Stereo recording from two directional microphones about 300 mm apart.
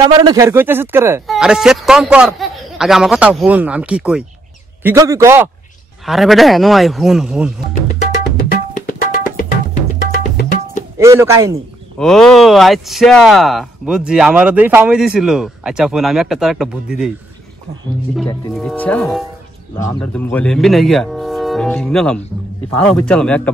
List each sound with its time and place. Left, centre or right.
0.1 s a man's voice: centre
8.4 s tabla: left
11.0 s a man's voice: centre
12.0 s speech: centre
18.1 s speech: centre